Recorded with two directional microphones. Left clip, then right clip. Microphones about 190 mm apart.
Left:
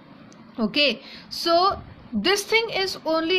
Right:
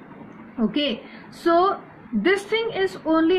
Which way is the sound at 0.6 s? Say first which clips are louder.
Left 3 dB; 45° left (ahead or behind).